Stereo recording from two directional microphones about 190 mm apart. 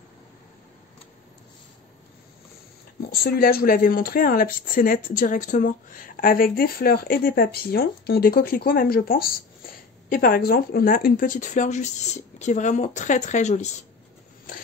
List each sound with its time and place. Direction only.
3.0 s speech: 55° left (ahead or behind); by 13.8 s 35° left (ahead or behind)